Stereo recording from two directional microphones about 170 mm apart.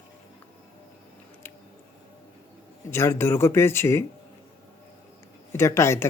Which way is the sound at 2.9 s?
15° left (ahead or behind).